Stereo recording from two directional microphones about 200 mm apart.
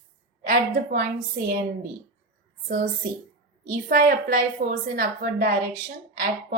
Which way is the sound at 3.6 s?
50° right (ahead or behind).